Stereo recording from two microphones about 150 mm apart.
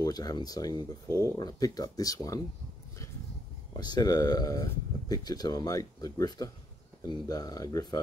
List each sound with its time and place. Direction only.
0.0 s speech: 25° left (ahead or behind)
3.7 s speech: 25° left (ahead or behind)